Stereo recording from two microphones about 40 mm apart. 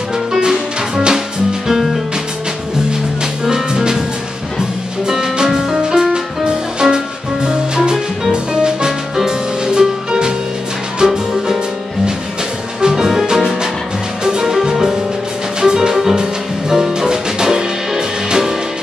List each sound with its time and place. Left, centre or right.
3.4 s music: centre
5.1 s music: centre
12.8 s music: centre